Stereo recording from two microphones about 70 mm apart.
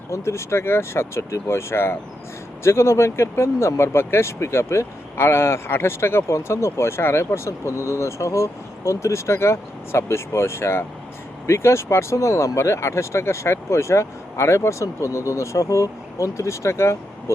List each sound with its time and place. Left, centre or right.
0.1 s speech: left